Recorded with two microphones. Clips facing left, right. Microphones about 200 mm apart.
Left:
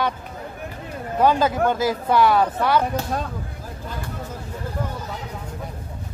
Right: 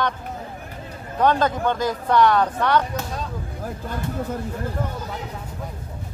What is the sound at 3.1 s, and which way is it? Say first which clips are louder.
Speech: left 4 dB; 55° left (ahead or behind).